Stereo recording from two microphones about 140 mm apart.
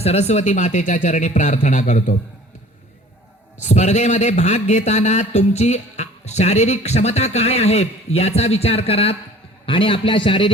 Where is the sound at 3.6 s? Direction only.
55° left (ahead or behind).